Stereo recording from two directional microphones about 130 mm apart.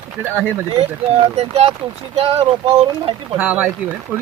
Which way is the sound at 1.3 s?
50° right (ahead or behind).